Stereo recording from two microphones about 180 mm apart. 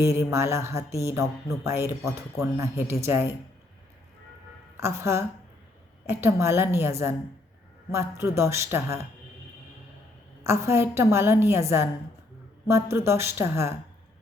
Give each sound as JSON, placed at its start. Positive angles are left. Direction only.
{"t": 0.0, "sound": "a woman's voice", "side_deg": -15}
{"t": 4.8, "sound": "a woman's voice", "side_deg": -15}
{"t": 10.4, "sound": "a woman's voice", "side_deg": -15}